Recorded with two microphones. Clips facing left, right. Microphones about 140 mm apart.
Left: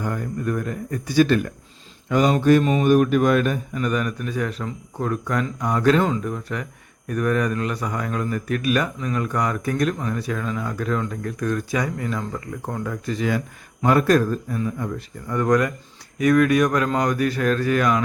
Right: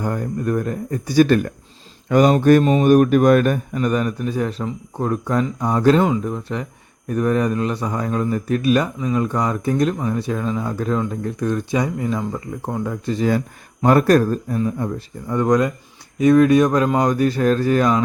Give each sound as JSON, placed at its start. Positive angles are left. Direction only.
{"t": 0.0, "sound": "speech", "side_deg": -35}
{"t": 3.8, "sound": "speech", "side_deg": -35}
{"t": 6.0, "sound": "speech", "side_deg": -20}